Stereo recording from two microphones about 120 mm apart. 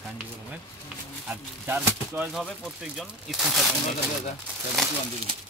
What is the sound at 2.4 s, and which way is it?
Speech, centre (ahead or behind).